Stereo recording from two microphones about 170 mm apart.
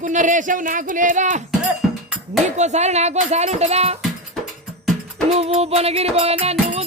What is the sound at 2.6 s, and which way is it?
Music, 40° right (ahead or behind).